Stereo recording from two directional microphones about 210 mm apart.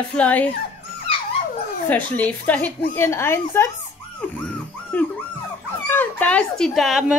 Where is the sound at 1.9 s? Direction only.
5° left (ahead or behind).